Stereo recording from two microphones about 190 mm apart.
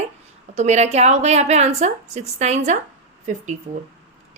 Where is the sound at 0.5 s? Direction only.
35° right (ahead or behind).